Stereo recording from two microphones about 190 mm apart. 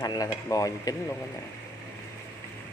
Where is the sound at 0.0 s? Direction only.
20° left (ahead or behind).